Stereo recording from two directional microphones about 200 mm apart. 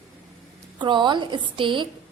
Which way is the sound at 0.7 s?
25° right (ahead or behind).